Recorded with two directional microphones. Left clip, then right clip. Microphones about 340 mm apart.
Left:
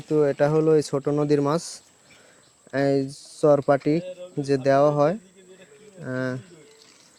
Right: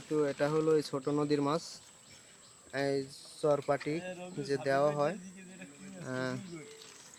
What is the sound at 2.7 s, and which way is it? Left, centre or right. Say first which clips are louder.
Speech: left 11 dB; left.